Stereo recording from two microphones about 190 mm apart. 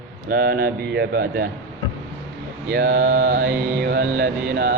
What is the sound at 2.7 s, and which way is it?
Speech, 55° right (ahead or behind).